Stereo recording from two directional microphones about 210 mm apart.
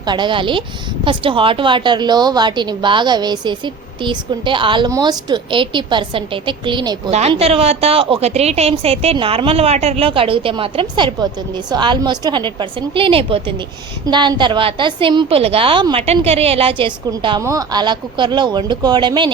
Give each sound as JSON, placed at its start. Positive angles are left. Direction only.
{"t": 0.0, "sound": "a woman's voice", "side_deg": -20}